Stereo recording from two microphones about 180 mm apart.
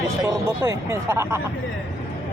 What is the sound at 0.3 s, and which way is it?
Speech, 15° right (ahead or behind).